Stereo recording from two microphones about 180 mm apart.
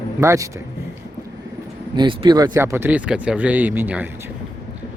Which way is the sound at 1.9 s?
25° right (ahead or behind).